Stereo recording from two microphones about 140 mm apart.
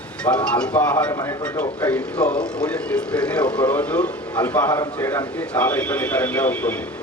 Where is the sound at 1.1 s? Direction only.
20° left (ahead or behind).